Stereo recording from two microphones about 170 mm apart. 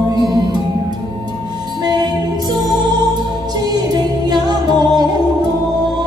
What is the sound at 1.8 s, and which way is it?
Music, 25° right (ahead or behind).